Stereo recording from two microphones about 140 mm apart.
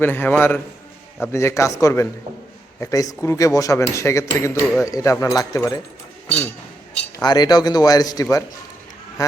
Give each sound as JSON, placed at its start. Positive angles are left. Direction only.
{"t": 0.0, "sound": "a man's voice", "side_deg": 15}
{"t": 6.2, "sound": "speech", "side_deg": 10}
{"t": 7.2, "sound": "a man's voice", "side_deg": 30}